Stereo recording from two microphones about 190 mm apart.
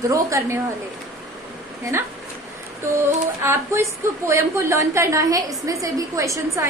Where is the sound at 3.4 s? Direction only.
15° right (ahead or behind).